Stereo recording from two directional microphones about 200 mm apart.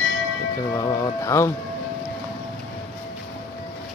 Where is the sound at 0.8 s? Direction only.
15° left (ahead or behind).